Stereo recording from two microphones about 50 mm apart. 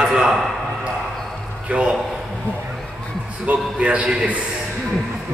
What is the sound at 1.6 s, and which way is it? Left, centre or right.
Speech, right.